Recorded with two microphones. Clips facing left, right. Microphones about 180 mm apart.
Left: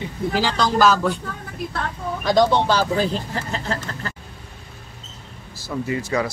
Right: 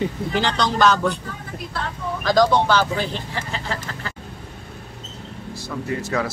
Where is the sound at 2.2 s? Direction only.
20° left (ahead or behind).